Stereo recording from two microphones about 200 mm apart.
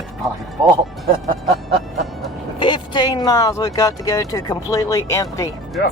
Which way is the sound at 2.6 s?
25° left (ahead or behind).